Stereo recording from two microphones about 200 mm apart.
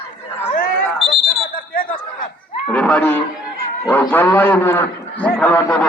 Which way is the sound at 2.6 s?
5° left (ahead or behind).